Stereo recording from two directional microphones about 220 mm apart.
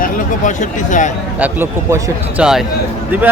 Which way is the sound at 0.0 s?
35° left (ahead or behind).